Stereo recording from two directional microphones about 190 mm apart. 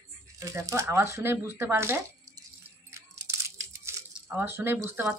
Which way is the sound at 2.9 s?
15° right (ahead or behind).